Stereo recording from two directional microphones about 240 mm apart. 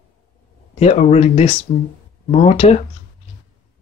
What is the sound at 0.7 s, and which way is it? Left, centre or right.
Speech, left.